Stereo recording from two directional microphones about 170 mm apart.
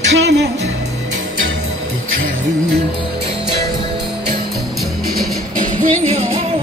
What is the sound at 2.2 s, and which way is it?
Music, 70° right (ahead or behind).